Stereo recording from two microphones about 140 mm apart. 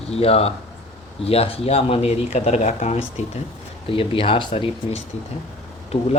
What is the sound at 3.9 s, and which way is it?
Speech, 40° left (ahead or behind).